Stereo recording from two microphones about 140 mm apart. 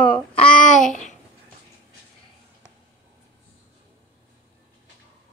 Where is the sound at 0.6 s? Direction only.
65° left (ahead or behind).